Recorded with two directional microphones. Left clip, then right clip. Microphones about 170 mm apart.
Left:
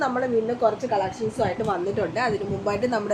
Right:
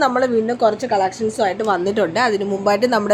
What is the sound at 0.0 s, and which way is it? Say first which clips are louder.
A woman's voice: right 7 dB; 55° right (ahead or behind).